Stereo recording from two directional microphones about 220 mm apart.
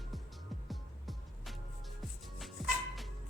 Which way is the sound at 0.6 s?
Centre (ahead or behind).